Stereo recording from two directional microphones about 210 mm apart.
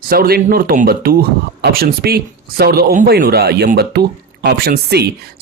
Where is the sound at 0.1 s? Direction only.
45° right (ahead or behind).